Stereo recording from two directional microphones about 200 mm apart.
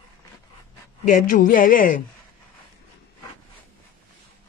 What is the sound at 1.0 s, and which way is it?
Speech, 40° left (ahead or behind).